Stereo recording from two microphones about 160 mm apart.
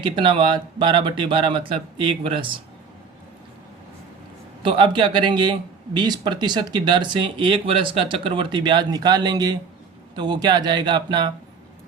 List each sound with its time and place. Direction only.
0.0 s speech: 30° right (ahead or behind)
4.6 s speech: 30° right (ahead or behind)